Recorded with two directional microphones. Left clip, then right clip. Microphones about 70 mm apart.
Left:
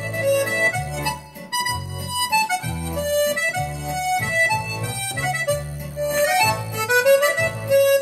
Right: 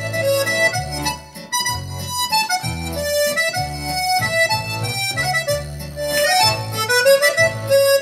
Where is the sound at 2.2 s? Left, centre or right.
Right.